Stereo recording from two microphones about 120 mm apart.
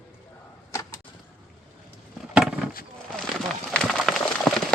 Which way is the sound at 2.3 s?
10° right (ahead or behind).